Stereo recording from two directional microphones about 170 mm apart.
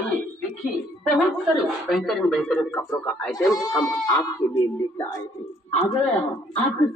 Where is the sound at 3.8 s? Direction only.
20° left (ahead or behind).